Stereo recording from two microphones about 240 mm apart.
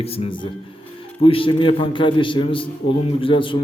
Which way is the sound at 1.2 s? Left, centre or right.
Left.